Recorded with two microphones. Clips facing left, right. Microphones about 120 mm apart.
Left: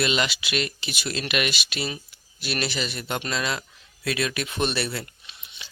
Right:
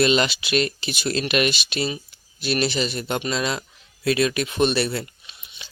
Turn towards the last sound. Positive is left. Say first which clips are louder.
# even
turn(degrees=-25)  # may be behind; listen again after turning